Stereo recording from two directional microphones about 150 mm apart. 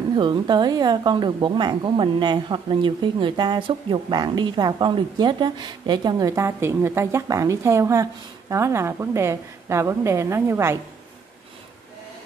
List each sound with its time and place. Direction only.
0.1 s a woman's voice: 30° right (ahead or behind); by 10.8 s 15° right (ahead or behind)